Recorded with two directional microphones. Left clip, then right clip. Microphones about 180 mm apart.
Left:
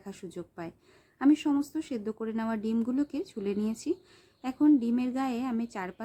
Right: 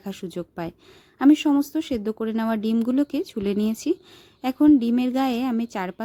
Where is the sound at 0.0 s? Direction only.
40° right (ahead or behind).